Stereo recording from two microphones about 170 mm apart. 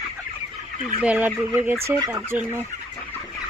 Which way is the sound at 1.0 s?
5° right (ahead or behind).